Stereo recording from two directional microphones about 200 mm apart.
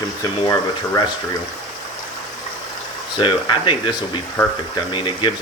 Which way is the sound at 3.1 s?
25° left (ahead or behind).